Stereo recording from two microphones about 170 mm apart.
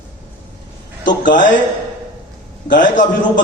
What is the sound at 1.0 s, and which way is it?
Speech, 50° left (ahead or behind).